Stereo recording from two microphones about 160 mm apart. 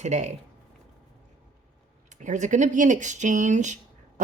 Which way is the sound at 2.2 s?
50° right (ahead or behind).